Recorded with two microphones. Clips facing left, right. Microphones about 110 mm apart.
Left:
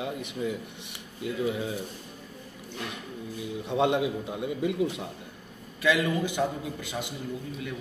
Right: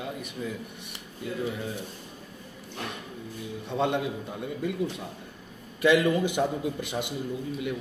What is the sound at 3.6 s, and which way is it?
A man's voice, 15° left (ahead or behind).